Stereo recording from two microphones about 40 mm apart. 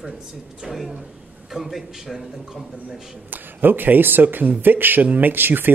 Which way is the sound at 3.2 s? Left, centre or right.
Right.